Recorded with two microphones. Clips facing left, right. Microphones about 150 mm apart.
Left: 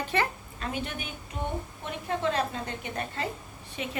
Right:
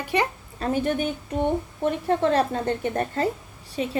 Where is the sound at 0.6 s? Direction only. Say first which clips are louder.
Right 11 dB; 45° right (ahead or behind).